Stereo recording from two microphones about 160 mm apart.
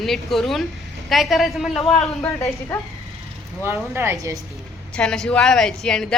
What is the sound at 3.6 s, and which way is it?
Speech, 15° right (ahead or behind).